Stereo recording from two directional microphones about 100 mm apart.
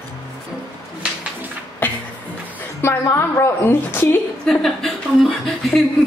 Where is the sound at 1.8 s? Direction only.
20° left (ahead or behind).